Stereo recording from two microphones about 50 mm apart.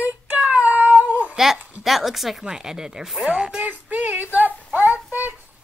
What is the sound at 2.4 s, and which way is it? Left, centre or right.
Speech, centre.